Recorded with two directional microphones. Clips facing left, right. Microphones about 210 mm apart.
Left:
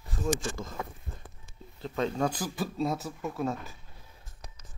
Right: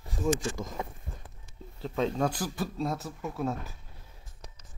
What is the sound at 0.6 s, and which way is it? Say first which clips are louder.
Speech: right 1 dB; 15° right (ahead or behind).